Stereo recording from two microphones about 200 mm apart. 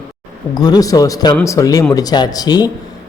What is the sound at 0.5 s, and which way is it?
A man's voice, 20° left (ahead or behind).